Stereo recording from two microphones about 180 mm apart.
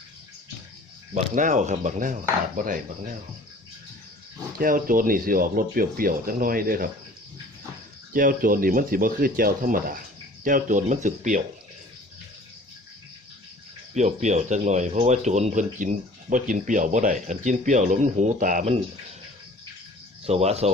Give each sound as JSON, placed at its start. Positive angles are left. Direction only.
{"t": 1.1, "sound": "speech", "side_deg": -45}
{"t": 4.5, "sound": "speech", "side_deg": -50}
{"t": 8.1, "sound": "speech", "side_deg": -50}
{"t": 13.9, "sound": "speech", "side_deg": -40}
{"t": 20.2, "sound": "speech", "side_deg": -35}